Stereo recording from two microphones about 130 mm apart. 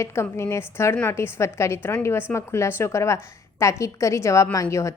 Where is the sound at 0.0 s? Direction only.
20° left (ahead or behind).